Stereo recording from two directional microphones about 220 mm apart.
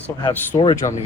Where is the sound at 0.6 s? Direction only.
20° left (ahead or behind).